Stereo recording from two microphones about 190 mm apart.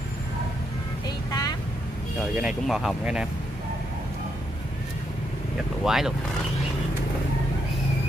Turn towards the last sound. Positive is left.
turn(degrees=0)  # may be behind; listen again after turning